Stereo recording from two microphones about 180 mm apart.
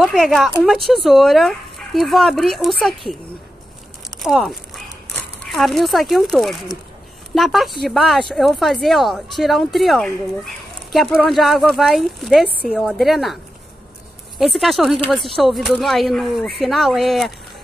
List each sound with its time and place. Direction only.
0.0 s speech: centre (ahead or behind)
4.2 s speech: centre (ahead or behind)
14.4 s speech: centre (ahead or behind)